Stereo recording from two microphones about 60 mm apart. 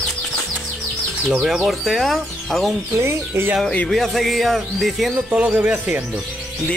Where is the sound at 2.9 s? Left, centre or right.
Right.